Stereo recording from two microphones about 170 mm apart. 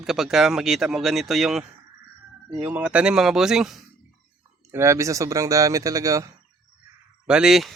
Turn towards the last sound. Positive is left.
turn(degrees=0)  # may be behind; listen again after turning